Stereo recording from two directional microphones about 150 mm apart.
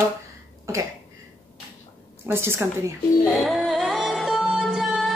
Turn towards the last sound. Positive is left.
turn(degrees=0)  # may be behind; listen again after turning